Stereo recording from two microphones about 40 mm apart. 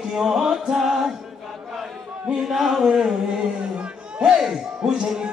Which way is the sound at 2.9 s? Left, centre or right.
Centre.